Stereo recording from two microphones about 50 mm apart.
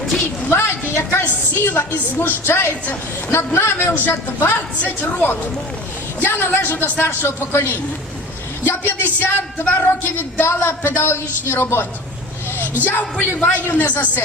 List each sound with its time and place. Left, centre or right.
0.5 s a woman's voice: left
6.2 s a woman's voice: left
10.4 s a woman's voice: left
12.8 s speech: left